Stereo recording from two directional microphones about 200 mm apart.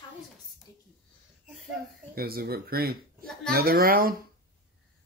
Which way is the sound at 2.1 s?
50° right (ahead or behind).